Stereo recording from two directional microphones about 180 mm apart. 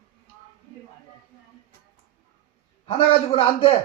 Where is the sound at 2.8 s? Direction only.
30° left (ahead or behind).